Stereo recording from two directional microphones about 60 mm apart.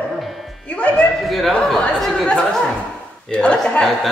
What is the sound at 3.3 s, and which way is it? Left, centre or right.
Speech, centre.